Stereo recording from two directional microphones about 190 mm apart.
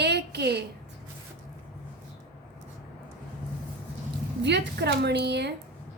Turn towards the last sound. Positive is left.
turn(degrees=-65)  # may be behind; listen again after turning